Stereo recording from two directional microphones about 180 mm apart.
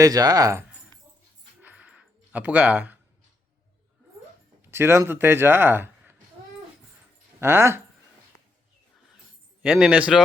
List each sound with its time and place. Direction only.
0.0 s speech: 20° right (ahead or behind)
1.6 s a sound: 10° right (ahead or behind)
4.7 s speech: 15° right (ahead or behind)
7.3 s speech: 15° right (ahead or behind)
9.6 s speech: 5° right (ahead or behind)